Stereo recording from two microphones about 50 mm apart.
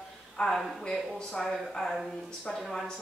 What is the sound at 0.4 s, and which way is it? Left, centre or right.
Speech, centre.